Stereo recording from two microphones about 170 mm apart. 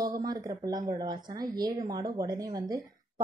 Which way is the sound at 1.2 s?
60° right (ahead or behind).